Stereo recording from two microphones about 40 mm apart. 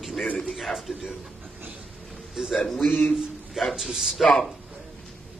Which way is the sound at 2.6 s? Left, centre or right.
Centre.